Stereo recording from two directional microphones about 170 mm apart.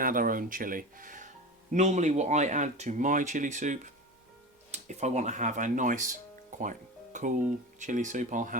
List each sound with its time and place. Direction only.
0.0 s speech: 55° right (ahead or behind)